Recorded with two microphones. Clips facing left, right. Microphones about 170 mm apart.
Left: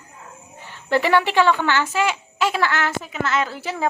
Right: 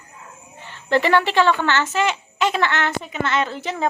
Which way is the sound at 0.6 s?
10° left (ahead or behind).